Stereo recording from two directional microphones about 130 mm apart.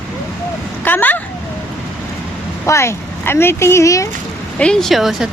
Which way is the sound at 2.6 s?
20° left (ahead or behind).